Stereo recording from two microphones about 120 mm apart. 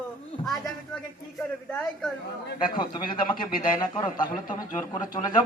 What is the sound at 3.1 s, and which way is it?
Speech, 45° left (ahead or behind).